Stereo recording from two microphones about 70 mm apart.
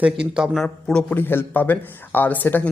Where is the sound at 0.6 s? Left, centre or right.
Centre.